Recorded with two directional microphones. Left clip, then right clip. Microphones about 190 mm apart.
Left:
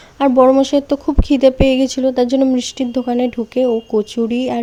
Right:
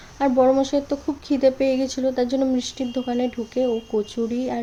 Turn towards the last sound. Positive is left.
turn(degrees=40)  # may be behind; listen again after turning